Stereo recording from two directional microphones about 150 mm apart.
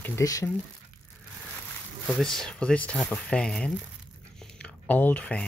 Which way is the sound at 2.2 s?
5° left (ahead or behind).